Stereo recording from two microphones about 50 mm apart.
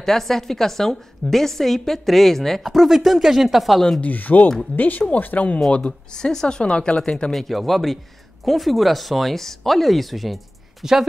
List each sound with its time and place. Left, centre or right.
0.0 s a woman's voice: centre
4.0 s speech: left
5.7 s speech: left
7.3 s a woman's voice: centre